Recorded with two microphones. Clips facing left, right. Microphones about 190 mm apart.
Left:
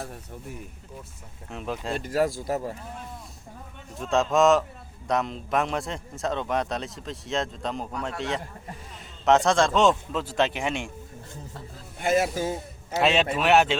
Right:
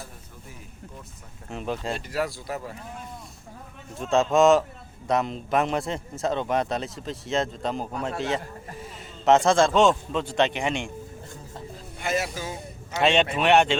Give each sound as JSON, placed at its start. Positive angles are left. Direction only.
{"t": 1.5, "sound": "speech", "side_deg": 0}
{"t": 2.0, "sound": "speech", "side_deg": 45}
{"t": 3.9, "sound": "speech", "side_deg": 0}
{"t": 9.2, "sound": "speech", "side_deg": 0}
{"t": 11.9, "sound": "speech", "side_deg": 50}
{"t": 12.9, "sound": "speech", "side_deg": 5}